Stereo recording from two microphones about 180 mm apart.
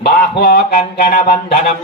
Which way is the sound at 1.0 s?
55° left (ahead or behind).